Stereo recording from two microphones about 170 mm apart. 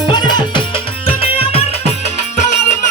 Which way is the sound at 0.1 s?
25° left (ahead or behind).